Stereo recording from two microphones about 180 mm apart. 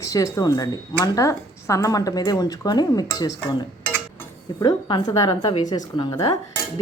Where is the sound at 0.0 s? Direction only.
20° left (ahead or behind).